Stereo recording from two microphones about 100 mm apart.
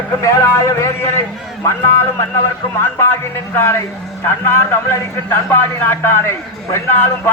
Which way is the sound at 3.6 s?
25° left (ahead or behind).